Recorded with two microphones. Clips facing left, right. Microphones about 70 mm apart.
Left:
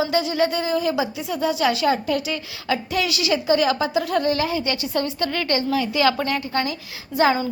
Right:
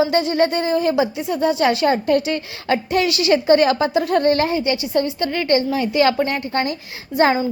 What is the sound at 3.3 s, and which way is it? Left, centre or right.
A woman's voice, right.